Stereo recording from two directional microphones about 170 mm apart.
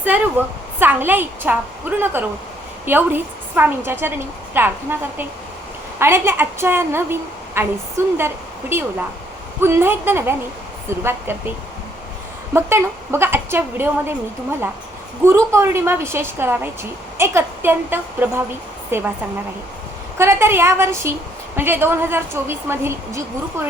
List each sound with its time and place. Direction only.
0.0 s a woman's voice: 10° right (ahead or behind)
6.0 s a woman's voice: 15° right (ahead or behind)
12.5 s a woman's voice: 15° right (ahead or behind)
15.3 s a woman's voice: 15° right (ahead or behind)
20.1 s a woman's voice: 15° right (ahead or behind)